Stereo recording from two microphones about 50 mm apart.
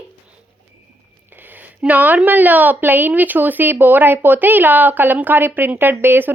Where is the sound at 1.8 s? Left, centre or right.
Right.